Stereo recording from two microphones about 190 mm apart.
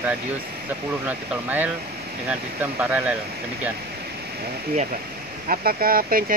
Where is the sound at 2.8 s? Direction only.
5° right (ahead or behind).